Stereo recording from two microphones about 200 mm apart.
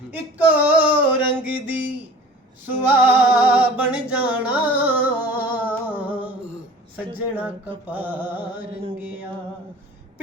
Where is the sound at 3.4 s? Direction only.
5° right (ahead or behind).